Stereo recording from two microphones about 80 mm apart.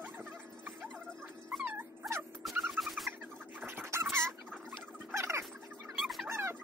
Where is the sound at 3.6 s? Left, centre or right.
Right.